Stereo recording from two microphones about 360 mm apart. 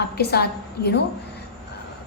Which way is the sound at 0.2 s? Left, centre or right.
Left.